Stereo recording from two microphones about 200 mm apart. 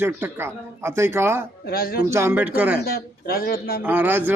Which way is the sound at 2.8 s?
50° left (ahead or behind).